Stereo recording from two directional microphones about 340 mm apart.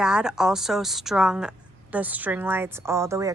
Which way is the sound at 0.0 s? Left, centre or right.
Centre.